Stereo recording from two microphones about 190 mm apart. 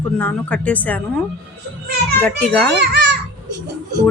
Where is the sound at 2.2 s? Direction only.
5° left (ahead or behind).